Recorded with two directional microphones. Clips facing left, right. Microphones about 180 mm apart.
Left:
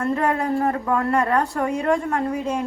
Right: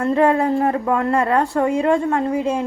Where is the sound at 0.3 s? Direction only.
25° right (ahead or behind).